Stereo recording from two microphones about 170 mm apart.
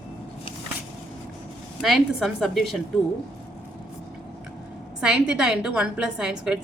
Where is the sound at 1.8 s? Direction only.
Centre (ahead or behind).